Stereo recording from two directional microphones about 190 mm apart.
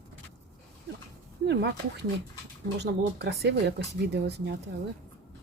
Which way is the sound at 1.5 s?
60° right (ahead or behind).